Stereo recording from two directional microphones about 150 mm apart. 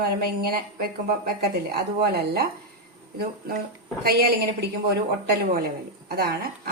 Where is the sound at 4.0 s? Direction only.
90° right.